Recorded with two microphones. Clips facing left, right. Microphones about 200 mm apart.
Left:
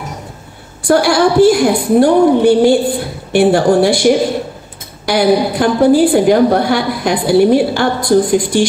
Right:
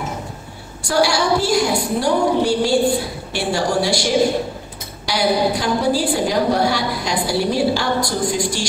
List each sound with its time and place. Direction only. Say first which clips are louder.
0.8 s a woman's voice: left 7 dB; 55° left (ahead or behind)